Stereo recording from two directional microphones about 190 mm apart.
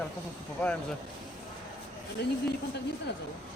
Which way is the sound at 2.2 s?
60° left (ahead or behind).